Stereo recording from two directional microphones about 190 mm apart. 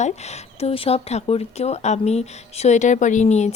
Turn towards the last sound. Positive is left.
turn(degrees=35)  # may be behind; listen again after turning